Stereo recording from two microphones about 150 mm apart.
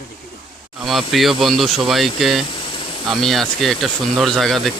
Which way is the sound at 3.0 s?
Centre (ahead or behind).